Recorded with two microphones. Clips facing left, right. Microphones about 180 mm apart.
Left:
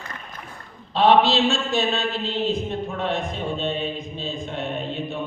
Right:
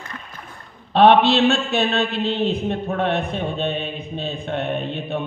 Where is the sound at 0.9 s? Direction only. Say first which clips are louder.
Right 3 dB; 60° right (ahead or behind).